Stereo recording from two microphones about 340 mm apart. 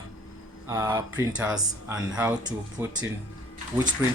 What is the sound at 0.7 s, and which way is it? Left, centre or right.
Speech, centre.